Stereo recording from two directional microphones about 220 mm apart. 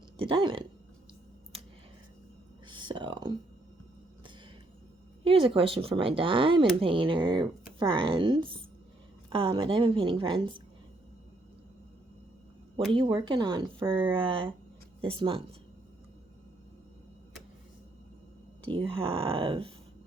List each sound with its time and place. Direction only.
0.2 s speech: 25° right (ahead or behind)
2.6 s a sound: 20° right (ahead or behind)
5.2 s speech: 25° right (ahead or behind)
12.9 s speech: 20° right (ahead or behind)
18.7 s speech: 25° right (ahead or behind)